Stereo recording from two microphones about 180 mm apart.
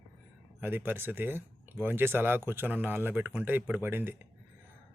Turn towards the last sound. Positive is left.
turn(degrees=-10)  # may be behind; listen again after turning